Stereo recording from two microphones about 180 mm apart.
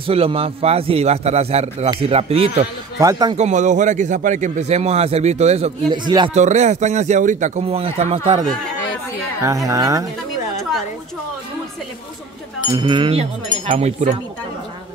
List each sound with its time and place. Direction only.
0.0 s a man's voice: 30° right (ahead or behind)
3.0 s speech: 20° right (ahead or behind)
3.3 s a man's voice: 40° right (ahead or behind)
5.9 s speech: 25° right (ahead or behind)
6.3 s a man's voice: 40° right (ahead or behind)
9.4 s a woman's voice: 20° right (ahead or behind)
12.7 s speech: 25° right (ahead or behind)
13.7 s a man's voice: 40° right (ahead or behind)